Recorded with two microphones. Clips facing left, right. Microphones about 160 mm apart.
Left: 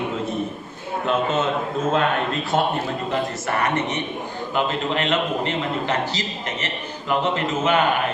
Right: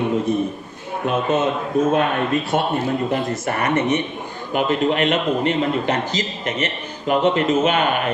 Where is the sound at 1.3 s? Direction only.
15° right (ahead or behind).